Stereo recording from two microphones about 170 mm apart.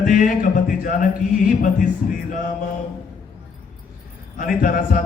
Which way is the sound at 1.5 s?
50° left (ahead or behind).